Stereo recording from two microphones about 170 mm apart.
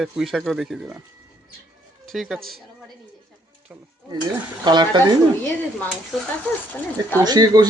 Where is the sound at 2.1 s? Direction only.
Centre (ahead or behind).